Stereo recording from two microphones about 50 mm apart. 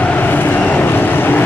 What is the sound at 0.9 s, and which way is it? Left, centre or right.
Vehicle, left.